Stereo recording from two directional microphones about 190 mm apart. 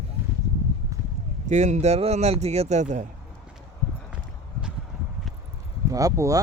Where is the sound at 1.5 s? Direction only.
35° right (ahead or behind).